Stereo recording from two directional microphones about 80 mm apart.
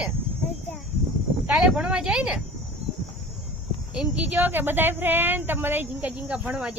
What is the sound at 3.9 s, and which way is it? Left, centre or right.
A woman's voice, centre.